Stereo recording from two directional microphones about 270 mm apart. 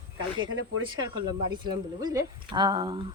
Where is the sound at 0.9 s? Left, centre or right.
Centre.